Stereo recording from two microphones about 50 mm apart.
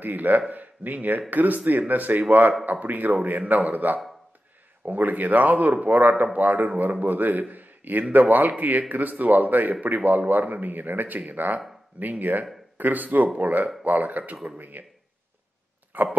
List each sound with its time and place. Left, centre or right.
0.0 s a man's voice: right
15.9 s speech: right